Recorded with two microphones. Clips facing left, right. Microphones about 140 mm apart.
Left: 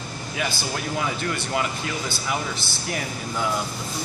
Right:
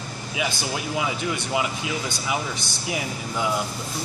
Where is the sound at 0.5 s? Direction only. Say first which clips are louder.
Even; 5° right (ahead or behind).